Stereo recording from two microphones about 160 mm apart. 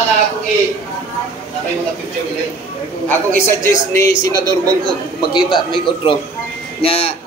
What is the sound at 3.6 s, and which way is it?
A man's voice, 20° left (ahead or behind).